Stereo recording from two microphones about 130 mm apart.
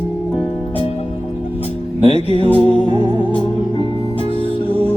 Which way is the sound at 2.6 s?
40° right (ahead or behind).